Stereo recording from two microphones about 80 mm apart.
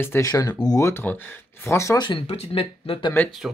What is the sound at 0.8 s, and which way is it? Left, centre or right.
Speech, left.